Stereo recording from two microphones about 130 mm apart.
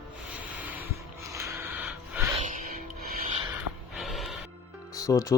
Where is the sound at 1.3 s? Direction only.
25° right (ahead or behind).